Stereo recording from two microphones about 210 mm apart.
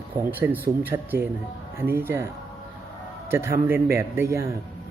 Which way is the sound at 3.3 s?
10° right (ahead or behind).